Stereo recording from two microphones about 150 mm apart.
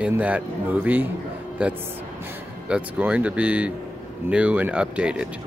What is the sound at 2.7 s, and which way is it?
Speech, 10° right (ahead or behind).